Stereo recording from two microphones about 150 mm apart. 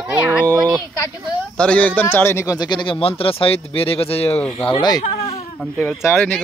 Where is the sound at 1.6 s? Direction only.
10° left (ahead or behind); by 5.0 s 30° left (ahead or behind).